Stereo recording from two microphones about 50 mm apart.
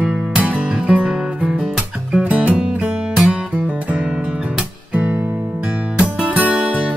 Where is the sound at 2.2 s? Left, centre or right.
Right.